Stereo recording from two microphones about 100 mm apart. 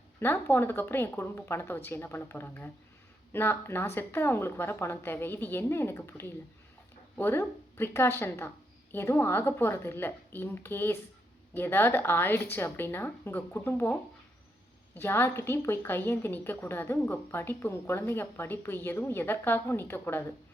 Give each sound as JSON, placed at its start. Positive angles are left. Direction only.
{"t": 0.2, "sound": "a woman's voice", "side_deg": 20}
{"t": 14.9, "sound": "a woman's voice", "side_deg": 20}